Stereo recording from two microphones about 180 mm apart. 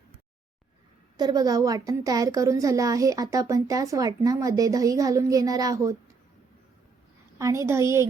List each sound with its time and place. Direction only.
1.1 s a woman's voice: 20° right (ahead or behind)
7.3 s a woman's voice: 15° right (ahead or behind)